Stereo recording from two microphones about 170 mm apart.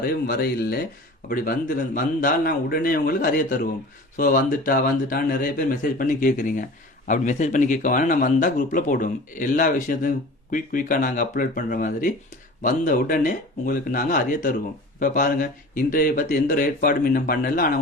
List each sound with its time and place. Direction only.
0.0 s speech: 65° left (ahead or behind)
1.3 s speech: 55° left (ahead or behind)